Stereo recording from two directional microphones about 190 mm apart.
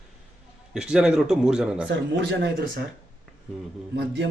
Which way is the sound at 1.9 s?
65° right (ahead or behind).